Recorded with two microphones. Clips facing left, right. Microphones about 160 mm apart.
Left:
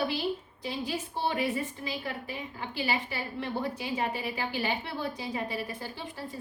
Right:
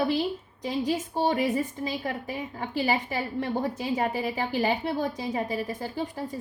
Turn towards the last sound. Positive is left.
turn(degrees=-45)  # may be behind; listen again after turning